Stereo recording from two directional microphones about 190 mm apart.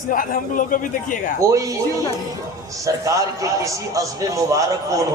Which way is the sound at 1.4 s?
15° right (ahead or behind).